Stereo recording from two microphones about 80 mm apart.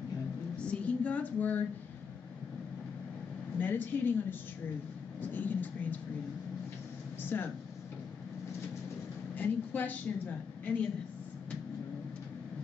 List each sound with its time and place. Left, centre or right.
0.6 s a sound: centre
3.5 s a woman's voice: left
7.2 s speech: left
9.3 s a woman's voice: left